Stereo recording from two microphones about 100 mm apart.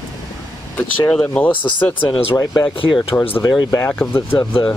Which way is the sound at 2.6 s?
60° left (ahead or behind).